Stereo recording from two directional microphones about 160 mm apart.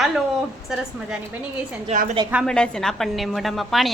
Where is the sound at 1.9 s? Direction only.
45° right (ahead or behind).